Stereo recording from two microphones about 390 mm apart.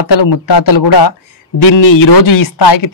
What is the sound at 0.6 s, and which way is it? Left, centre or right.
Speech, left.